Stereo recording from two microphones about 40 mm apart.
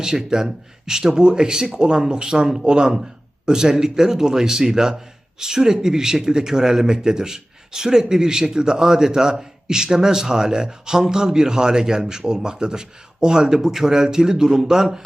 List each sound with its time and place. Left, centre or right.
0.0 s speech: centre